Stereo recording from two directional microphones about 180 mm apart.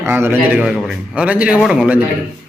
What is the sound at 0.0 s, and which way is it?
A man's voice, 10° right (ahead or behind).